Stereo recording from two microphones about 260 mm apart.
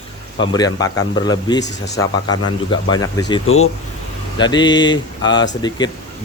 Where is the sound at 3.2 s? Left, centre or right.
Centre.